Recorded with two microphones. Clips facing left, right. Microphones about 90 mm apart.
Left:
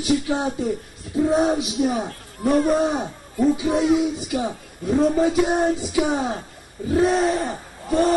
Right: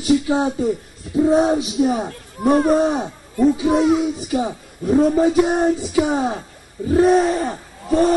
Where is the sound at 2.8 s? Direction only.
Centre (ahead or behind).